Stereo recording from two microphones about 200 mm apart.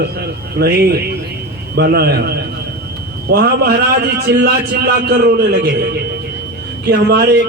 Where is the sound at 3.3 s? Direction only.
50° right (ahead or behind).